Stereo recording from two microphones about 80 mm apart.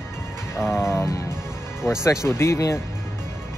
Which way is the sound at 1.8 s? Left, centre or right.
Left.